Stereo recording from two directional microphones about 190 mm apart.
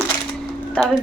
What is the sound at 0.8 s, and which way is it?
Speech, 5° left (ahead or behind).